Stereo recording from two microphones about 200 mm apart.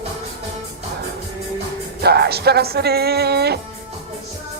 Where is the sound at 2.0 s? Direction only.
55° right (ahead or behind).